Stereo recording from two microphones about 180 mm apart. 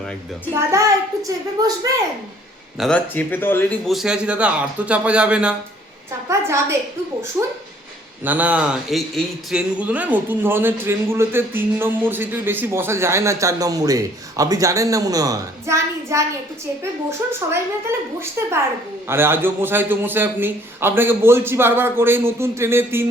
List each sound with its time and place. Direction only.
0.5 s a woman's voice: 15° right (ahead or behind)
2.7 s speech: 5° left (ahead or behind)
6.2 s speech: 15° right (ahead or behind)
8.2 s speech: 10° right (ahead or behind)
18.4 s speech: 15° right (ahead or behind)